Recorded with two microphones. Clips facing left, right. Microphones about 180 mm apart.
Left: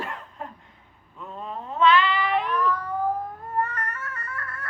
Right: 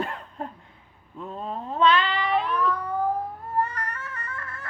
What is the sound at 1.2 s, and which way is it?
Cat, 35° right (ahead or behind).